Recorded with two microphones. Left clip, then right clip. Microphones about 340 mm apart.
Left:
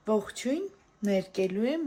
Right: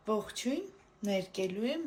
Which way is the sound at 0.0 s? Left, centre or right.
Left.